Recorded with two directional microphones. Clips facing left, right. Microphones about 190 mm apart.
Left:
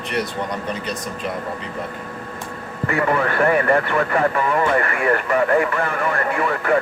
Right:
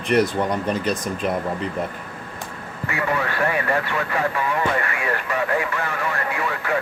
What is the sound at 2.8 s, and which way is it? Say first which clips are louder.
Speech: left 5 dB; 50° left (ahead or behind).